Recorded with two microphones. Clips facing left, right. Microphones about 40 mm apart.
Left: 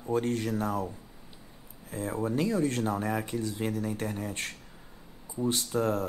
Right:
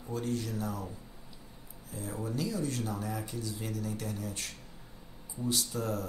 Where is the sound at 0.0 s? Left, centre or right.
Left.